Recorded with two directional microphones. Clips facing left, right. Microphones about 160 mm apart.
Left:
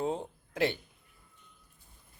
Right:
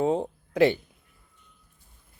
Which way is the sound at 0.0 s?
75° right (ahead or behind).